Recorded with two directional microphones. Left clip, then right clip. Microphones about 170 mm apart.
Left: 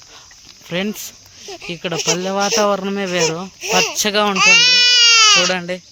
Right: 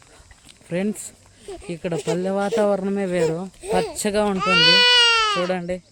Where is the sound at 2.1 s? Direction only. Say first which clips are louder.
Left 3 dB; centre (ahead or behind).